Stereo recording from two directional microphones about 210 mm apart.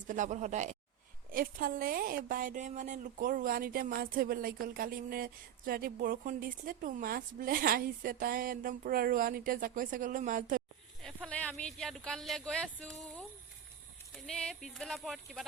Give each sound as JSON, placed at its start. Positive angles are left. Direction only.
{"t": 0.1, "sound": "a woman's voice", "side_deg": -35}
{"t": 11.0, "sound": "speech", "side_deg": 5}
{"t": 14.3, "sound": "speech", "side_deg": 5}